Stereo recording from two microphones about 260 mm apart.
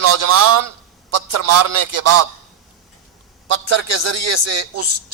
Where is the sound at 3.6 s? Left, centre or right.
Right.